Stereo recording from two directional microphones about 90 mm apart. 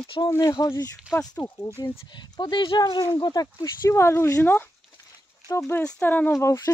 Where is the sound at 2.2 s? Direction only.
55° left (ahead or behind).